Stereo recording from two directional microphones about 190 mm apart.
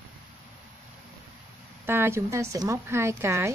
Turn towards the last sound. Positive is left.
turn(degrees=-15)  # may be behind; listen again after turning